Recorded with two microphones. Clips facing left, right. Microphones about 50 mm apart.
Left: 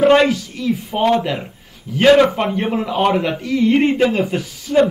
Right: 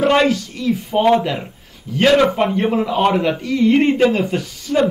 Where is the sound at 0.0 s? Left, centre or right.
Centre.